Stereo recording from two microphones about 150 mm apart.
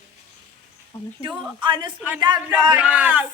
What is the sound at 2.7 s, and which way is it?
Speech, 10° right (ahead or behind).